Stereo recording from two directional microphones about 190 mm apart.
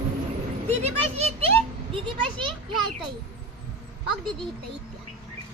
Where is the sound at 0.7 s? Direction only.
35° right (ahead or behind).